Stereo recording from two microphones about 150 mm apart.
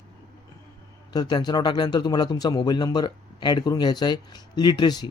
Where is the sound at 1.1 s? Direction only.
30° left (ahead or behind).